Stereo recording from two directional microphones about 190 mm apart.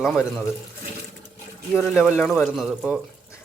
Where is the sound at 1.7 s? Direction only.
5° right (ahead or behind).